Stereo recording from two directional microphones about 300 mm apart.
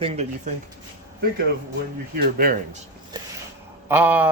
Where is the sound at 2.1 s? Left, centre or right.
Right.